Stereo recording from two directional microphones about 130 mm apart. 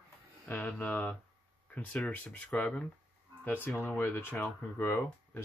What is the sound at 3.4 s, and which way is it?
Speech, 15° left (ahead or behind).